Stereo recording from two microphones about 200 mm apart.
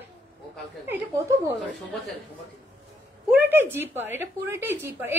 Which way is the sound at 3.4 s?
10° right (ahead or behind).